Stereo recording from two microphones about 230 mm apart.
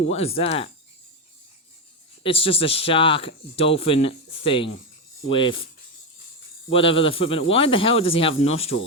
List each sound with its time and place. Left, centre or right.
0.1 s speech: left
2.2 s speech: left
6.7 s speech: left